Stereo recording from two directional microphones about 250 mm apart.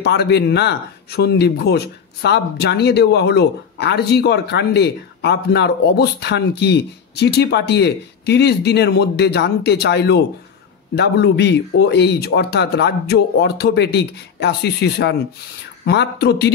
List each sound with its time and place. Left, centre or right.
0.0 s speech: left